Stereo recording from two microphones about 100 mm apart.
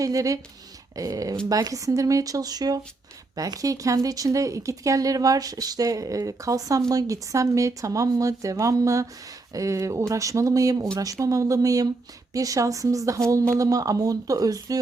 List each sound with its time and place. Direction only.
0.0 s speech: 35° right (ahead or behind)